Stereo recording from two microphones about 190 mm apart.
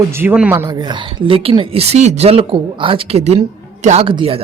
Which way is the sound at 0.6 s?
25° right (ahead or behind).